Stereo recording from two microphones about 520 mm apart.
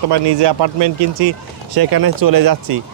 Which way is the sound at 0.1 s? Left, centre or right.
Right.